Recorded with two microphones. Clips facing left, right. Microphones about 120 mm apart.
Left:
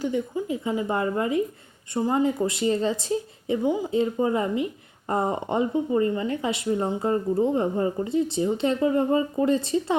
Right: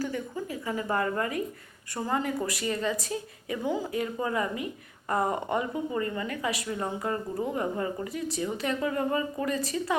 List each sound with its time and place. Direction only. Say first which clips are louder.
0.0 s a woman's voice: left 6 dB; 20° left (ahead or behind)